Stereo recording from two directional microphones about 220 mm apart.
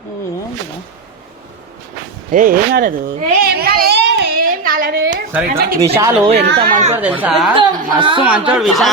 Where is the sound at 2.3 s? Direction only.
40° right (ahead or behind).